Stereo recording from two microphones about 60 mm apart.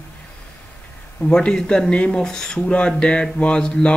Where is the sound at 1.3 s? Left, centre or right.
Centre.